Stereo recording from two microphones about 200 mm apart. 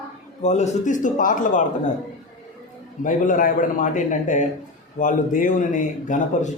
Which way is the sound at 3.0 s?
40° left (ahead or behind).